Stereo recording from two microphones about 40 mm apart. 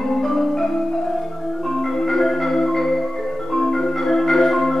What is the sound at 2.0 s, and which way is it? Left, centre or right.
Marimba, centre.